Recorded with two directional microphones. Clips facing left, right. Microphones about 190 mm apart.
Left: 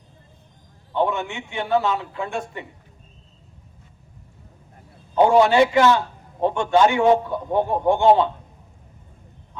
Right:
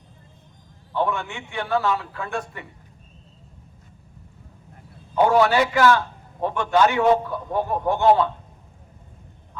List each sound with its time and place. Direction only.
0.9 s a man's voice: 20° left (ahead or behind)
5.1 s a man's voice: 25° left (ahead or behind)